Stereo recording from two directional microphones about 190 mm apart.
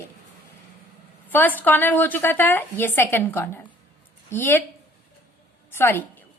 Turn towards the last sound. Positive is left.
turn(degrees=10)  # may be behind; listen again after turning